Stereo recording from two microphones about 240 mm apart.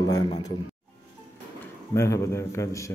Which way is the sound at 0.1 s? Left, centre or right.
Centre.